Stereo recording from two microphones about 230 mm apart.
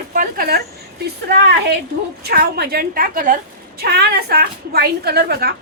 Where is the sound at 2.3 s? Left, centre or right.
Right.